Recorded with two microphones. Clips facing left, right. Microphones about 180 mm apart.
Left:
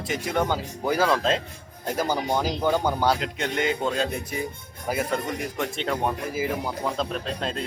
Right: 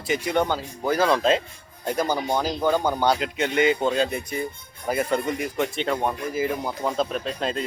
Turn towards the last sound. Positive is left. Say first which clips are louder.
# right 2 dB
turn(degrees=-5)  # may be behind; listen again after turning